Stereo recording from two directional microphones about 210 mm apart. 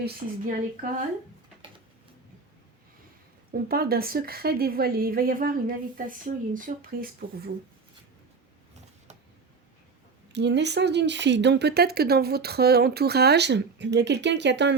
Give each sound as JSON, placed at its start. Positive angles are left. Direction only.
{"t": 0.2, "sound": "speech", "side_deg": -25}
{"t": 3.5, "sound": "speech", "side_deg": -45}
{"t": 10.3, "sound": "speech", "side_deg": -55}